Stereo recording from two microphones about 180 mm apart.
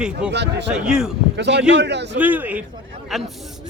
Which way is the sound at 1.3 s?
75° right (ahead or behind).